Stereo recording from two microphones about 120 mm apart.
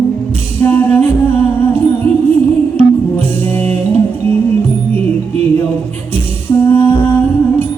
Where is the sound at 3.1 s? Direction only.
15° left (ahead or behind).